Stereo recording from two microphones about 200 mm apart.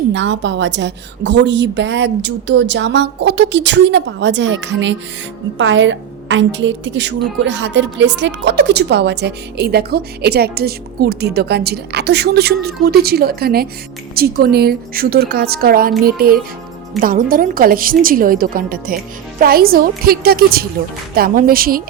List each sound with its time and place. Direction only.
0.1 s a woman's voice: 65° right (ahead or behind); by 21.8 s 45° right (ahead or behind)